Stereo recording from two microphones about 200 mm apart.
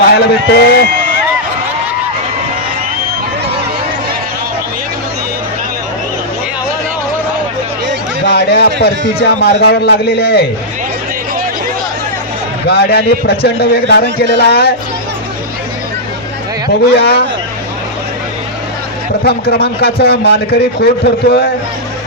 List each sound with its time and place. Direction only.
0.2 s a man's voice: 55° left (ahead or behind)
8.3 s speech: 55° left (ahead or behind)
12.6 s a man's voice: 55° left (ahead or behind)
16.8 s a man's voice: 55° left (ahead or behind)
19.2 s a man's voice: 55° left (ahead or behind)